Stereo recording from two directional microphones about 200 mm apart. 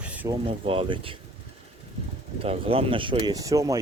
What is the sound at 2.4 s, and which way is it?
Speech, 30° right (ahead or behind).